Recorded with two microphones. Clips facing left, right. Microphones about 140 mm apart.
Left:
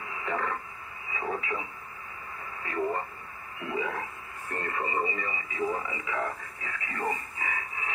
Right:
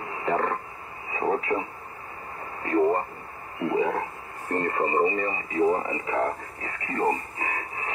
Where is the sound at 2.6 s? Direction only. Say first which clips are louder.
Right 8 dB; 40° right (ahead or behind).